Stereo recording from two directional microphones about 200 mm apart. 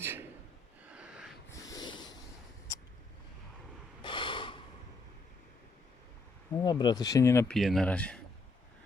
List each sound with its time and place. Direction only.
0.0 s gasp: 10° right (ahead or behind)
0.9 s a sound: 5° right (ahead or behind)
1.5 s snort: 15° left (ahead or behind)
4.0 s snort: 25° left (ahead or behind)
6.5 s speech: 20° left (ahead or behind)
7.5 s speech: centre (ahead or behind)